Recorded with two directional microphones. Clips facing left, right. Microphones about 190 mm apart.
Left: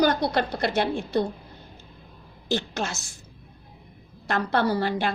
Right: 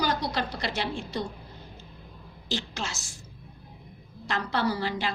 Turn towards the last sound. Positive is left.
turn(degrees=55)  # may be behind; listen again after turning